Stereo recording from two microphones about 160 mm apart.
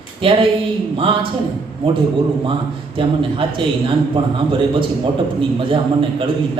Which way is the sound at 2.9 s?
35° right (ahead or behind).